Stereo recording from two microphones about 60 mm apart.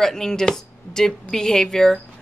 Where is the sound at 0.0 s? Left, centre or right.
Centre.